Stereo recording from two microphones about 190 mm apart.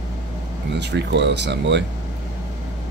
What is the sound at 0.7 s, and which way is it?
Speech, 65° right (ahead or behind).